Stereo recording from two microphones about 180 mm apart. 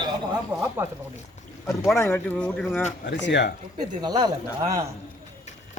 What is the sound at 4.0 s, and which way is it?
Speech, 20° right (ahead or behind).